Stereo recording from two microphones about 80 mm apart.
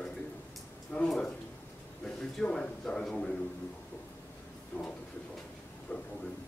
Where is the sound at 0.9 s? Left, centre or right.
Centre.